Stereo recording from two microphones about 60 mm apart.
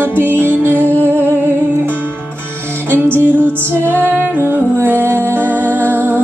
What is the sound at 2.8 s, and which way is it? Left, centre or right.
Music, right.